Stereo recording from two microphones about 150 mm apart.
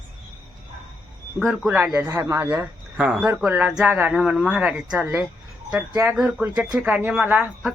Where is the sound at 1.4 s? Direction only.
Centre (ahead or behind).